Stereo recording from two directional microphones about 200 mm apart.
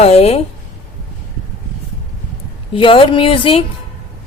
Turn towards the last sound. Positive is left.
turn(degrees=25)  # may be behind; listen again after turning